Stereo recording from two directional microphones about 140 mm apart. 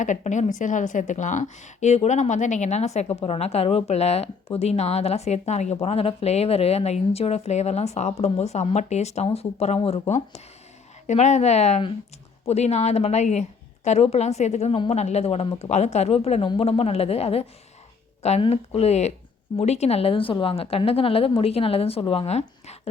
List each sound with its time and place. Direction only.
0.0 s a woman's voice: 60° left (ahead or behind)